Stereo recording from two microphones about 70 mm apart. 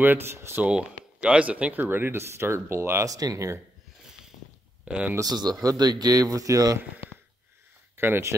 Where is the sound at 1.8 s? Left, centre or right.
Right.